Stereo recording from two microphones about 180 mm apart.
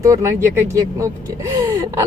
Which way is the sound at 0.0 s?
15° right (ahead or behind).